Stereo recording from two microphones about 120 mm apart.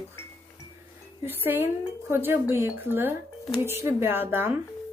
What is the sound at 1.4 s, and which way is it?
Speech, 15° right (ahead or behind).